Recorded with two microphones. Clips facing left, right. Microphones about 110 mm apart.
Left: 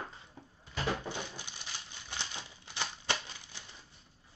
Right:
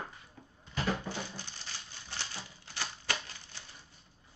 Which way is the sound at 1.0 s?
15° left (ahead or behind).